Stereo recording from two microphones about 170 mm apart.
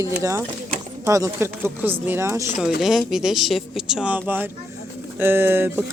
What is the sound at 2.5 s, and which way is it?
Speech, centre (ahead or behind).